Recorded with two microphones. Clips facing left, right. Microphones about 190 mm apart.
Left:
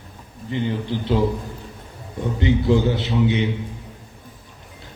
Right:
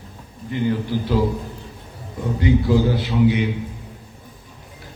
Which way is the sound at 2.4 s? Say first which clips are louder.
Right 1 dB; 25° left (ahead or behind).